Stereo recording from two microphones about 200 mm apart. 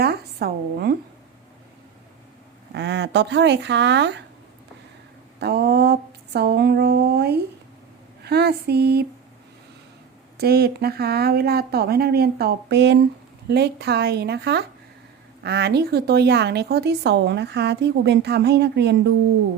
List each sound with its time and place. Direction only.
0.0 s speech: 50° right (ahead or behind)
2.7 s a woman's voice: 60° right (ahead or behind)
5.4 s speech: 55° right (ahead or behind)
10.3 s a woman's voice: 50° right (ahead or behind)